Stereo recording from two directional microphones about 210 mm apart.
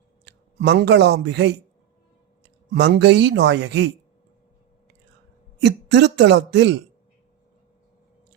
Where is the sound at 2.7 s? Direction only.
55° right (ahead or behind).